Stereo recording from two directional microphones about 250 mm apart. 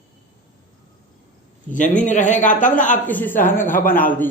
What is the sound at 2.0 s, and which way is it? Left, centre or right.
Speech, left.